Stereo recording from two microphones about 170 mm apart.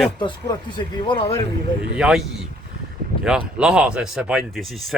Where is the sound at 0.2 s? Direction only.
25° left (ahead or behind).